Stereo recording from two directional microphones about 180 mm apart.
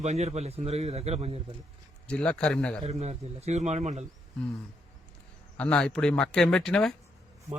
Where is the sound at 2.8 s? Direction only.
35° right (ahead or behind).